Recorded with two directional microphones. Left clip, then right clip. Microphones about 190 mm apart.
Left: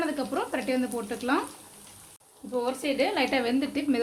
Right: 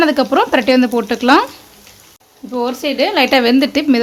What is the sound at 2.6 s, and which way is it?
Speech, 50° right (ahead or behind).